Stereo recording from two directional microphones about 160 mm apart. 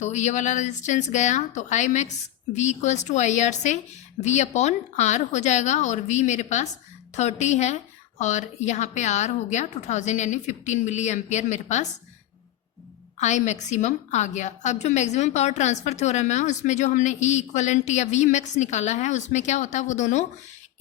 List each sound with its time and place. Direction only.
0.0 s a woman's voice: 50° left (ahead or behind)
13.1 s a woman's voice: 45° left (ahead or behind)